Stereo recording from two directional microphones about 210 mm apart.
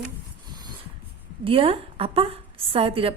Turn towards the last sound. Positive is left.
turn(degrees=-25)  # may be behind; listen again after turning